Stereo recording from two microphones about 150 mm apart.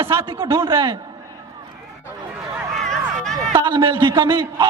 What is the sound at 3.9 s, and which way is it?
Speech, 35° right (ahead or behind).